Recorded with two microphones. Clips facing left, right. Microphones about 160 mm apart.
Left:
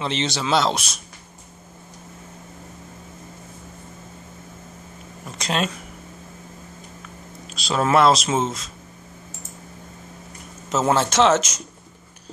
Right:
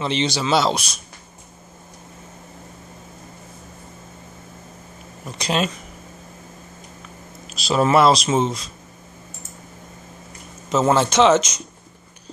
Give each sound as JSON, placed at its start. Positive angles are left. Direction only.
{"t": 0.0, "sound": "speech", "side_deg": 0}
{"t": 5.4, "sound": "speech", "side_deg": -5}
{"t": 7.4, "sound": "speech", "side_deg": -5}
{"t": 10.7, "sound": "speech", "side_deg": 5}